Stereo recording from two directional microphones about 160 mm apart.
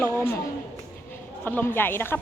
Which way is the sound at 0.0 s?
15° left (ahead or behind).